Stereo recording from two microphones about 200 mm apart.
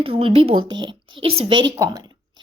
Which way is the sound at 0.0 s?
30° right (ahead or behind).